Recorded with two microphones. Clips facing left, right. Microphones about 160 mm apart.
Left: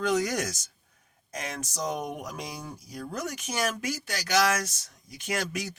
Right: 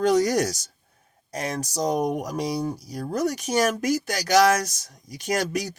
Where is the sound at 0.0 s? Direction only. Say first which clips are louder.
Right 7 dB; 40° right (ahead or behind).